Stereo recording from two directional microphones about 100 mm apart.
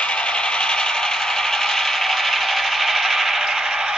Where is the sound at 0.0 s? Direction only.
10° left (ahead or behind).